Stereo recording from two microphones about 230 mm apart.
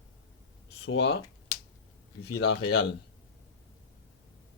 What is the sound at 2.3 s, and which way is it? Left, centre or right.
Speech, left.